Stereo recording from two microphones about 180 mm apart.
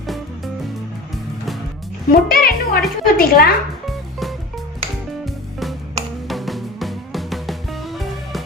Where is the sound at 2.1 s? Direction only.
55° left (ahead or behind).